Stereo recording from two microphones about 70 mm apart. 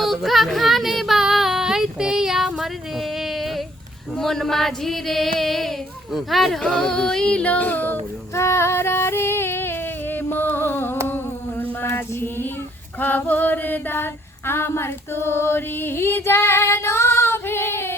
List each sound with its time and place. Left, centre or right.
0.0 s child singing: centre
4.1 s female singing: centre; by 7.9 s left
8.4 s female singing: left
11.1 s a sound: left
13.0 s female singing: left